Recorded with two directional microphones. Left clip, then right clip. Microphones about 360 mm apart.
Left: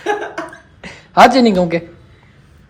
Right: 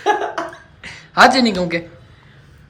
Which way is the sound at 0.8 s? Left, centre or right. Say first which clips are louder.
Left 3 dB; centre.